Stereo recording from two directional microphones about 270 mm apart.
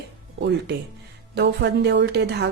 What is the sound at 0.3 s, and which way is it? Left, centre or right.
A woman's voice, right.